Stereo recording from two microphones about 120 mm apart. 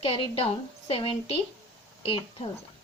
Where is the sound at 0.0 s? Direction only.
50° left (ahead or behind).